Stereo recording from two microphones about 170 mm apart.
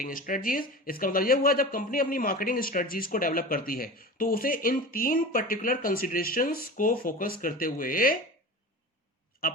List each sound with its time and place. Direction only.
0.0 s speech: 55° left (ahead or behind)